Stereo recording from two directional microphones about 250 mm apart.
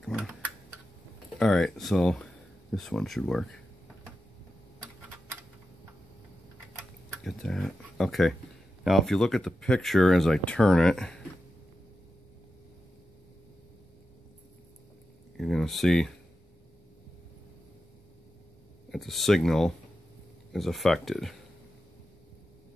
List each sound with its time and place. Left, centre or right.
0.0 s typing: centre
1.4 s speech: centre
7.1 s speech: centre
15.3 s a sound: centre
18.9 s speech: centre